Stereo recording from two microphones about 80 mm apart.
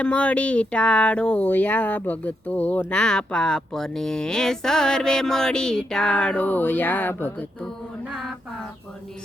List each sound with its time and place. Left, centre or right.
0.0 s speech: centre